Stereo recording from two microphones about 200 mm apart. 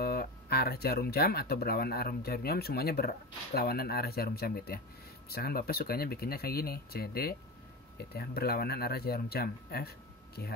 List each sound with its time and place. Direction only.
0.0 s speech: 50° left (ahead or behind)